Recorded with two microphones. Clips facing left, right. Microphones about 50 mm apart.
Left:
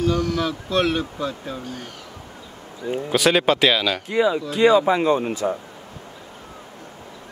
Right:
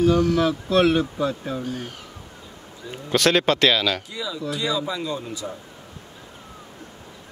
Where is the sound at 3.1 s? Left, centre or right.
Centre.